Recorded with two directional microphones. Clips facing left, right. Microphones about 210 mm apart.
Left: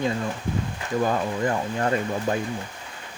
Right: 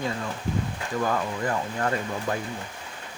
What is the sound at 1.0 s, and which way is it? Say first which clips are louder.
Speech: left 3 dB; 25° left (ahead or behind).